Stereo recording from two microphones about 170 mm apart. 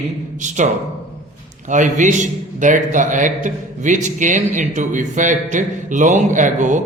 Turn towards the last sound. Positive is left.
turn(degrees=-45)  # may be behind; listen again after turning